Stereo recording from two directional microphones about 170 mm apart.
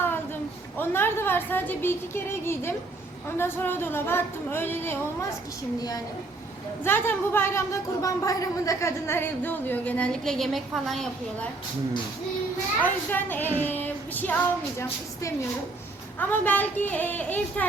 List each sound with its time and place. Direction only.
0.8 s a woman's voice: 15° left (ahead or behind)
6.8 s a woman's voice: 10° left (ahead or behind)
12.8 s a woman's voice: 10° left (ahead or behind)
13.6 s female singing: 10° left (ahead or behind)
16.1 s a woman's voice: 10° left (ahead or behind)